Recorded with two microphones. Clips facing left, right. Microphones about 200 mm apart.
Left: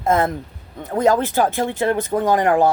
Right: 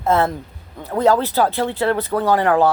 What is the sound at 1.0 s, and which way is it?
Speech, 15° left (ahead or behind).